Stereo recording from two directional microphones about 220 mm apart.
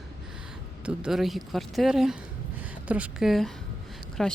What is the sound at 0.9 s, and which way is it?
Speech, 5° right (ahead or behind).